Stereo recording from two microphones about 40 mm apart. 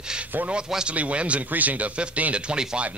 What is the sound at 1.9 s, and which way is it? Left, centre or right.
Speech, right.